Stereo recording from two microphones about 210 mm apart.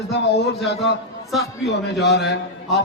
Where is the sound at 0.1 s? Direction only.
55° left (ahead or behind).